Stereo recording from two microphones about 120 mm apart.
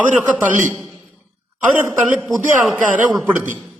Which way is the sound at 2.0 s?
10° right (ahead or behind).